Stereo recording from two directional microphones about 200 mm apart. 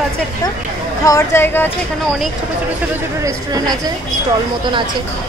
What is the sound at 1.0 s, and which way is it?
Speech, 15° left (ahead or behind).